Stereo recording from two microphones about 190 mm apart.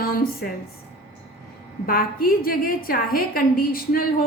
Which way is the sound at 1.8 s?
50° left (ahead or behind).